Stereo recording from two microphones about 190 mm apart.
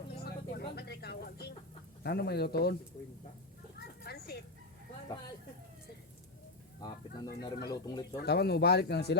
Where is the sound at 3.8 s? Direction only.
55° left (ahead or behind).